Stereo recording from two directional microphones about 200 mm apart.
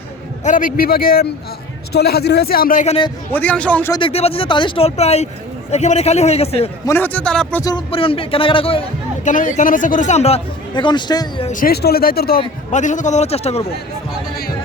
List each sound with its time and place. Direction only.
0.4 s a man's voice: 40° left (ahead or behind)
3.3 s a man's voice: 5° left (ahead or behind)
3.9 s a man's voice: 30° left (ahead or behind)
6.8 s a man's voice: 10° left (ahead or behind)
7.6 s speech: 25° left (ahead or behind)
9.2 s a man's voice: 40° left (ahead or behind); by 11.4 s 20° left (ahead or behind)
11.4 s a man's voice: 45° left (ahead or behind)
12.4 s a man's voice: 35° left (ahead or behind)